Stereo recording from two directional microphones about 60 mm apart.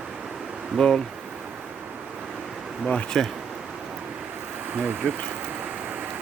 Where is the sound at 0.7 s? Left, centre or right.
Centre.